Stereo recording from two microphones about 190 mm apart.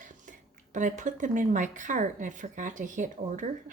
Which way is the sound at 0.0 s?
40° right (ahead or behind).